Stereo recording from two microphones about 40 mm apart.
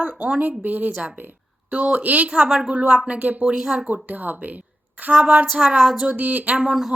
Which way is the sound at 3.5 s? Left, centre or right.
Centre.